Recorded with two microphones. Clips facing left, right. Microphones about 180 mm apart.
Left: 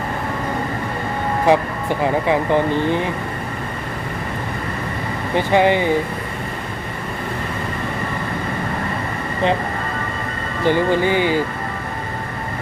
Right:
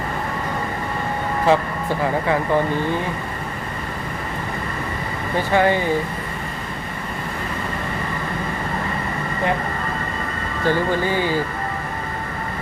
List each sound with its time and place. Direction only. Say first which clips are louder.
1.5 s speech: left 2 dB; 15° left (ahead or behind)
5.5 s speech: left 2 dB; 20° left (ahead or behind)
10.7 s speech: left 4 dB; 20° left (ahead or behind)